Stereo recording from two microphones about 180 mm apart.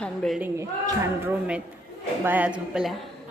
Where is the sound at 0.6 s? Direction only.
15° right (ahead or behind).